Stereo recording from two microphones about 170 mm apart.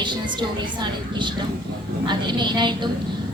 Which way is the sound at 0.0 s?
25° right (ahead or behind).